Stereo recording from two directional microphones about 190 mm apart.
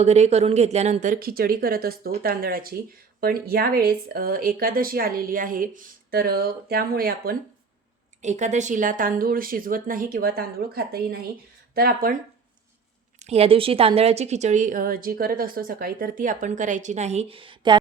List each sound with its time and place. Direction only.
0.0 s a woman's voice: 35° right (ahead or behind); by 7.3 s 50° right (ahead or behind)
8.2 s speech: 40° right (ahead or behind)
13.1 s a woman's voice: 35° right (ahead or behind)